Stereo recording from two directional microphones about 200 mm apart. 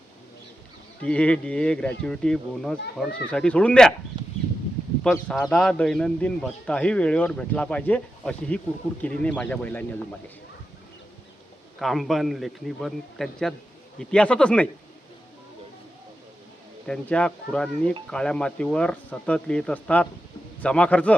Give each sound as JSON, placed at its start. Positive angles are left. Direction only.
{"t": 1.0, "sound": "speech", "side_deg": 5}
{"t": 4.1, "sound": "a sound", "side_deg": -25}
{"t": 5.3, "sound": "speech", "side_deg": 5}
{"t": 11.8, "sound": "speech", "side_deg": 0}
{"t": 16.8, "sound": "a man's voice", "side_deg": 5}